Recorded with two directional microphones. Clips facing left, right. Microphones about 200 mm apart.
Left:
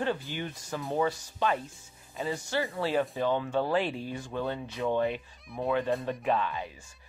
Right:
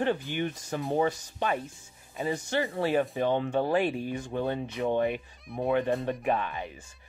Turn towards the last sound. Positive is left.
turn(degrees=-15)  # may be behind; listen again after turning